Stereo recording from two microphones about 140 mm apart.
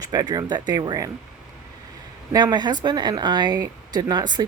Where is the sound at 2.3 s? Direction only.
30° right (ahead or behind).